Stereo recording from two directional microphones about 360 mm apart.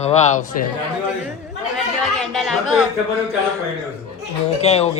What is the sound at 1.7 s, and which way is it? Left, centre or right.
Speech, centre.